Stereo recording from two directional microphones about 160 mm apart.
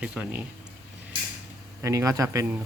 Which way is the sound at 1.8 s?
20° right (ahead or behind).